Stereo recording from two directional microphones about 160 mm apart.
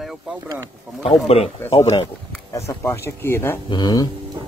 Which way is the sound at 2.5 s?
15° left (ahead or behind).